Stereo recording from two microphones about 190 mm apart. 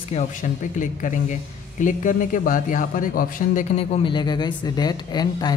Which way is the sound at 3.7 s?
30° left (ahead or behind).